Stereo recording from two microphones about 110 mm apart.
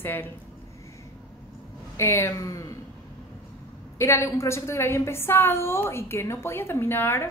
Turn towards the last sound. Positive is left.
turn(degrees=20)  # may be behind; listen again after turning